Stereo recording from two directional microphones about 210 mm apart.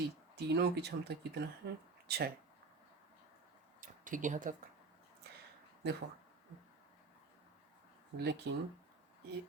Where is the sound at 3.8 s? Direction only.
40° right (ahead or behind).